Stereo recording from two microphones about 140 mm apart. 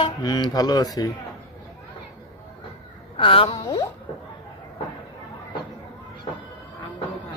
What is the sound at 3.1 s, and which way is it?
Speech, 40° left (ahead or behind).